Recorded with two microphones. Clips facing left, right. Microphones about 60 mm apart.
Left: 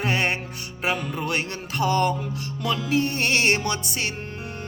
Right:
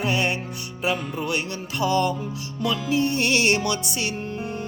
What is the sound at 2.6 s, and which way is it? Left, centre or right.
Music, left.